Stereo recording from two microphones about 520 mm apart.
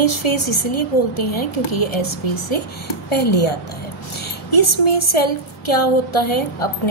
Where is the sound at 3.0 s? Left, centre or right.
Left.